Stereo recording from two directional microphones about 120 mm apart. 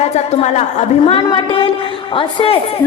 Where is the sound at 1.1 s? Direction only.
45° left (ahead or behind).